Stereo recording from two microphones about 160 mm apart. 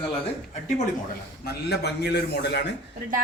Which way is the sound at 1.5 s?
90° left.